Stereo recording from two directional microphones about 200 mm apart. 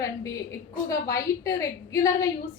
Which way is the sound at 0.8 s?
15° left (ahead or behind).